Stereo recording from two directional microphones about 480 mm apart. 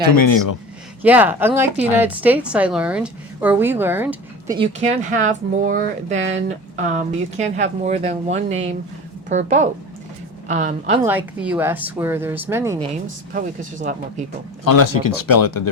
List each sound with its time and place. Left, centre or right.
0.0 s speech: left
1.0 s a woman's voice: centre
4.5 s a woman's voice: centre
13.3 s speech: centre
14.6 s speech: left